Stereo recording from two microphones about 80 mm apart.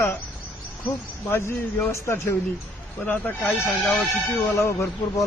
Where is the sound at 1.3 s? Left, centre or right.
Left.